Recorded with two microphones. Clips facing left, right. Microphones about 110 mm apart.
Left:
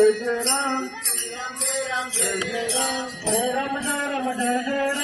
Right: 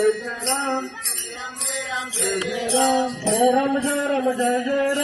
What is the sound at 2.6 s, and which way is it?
Music, 40° right (ahead or behind).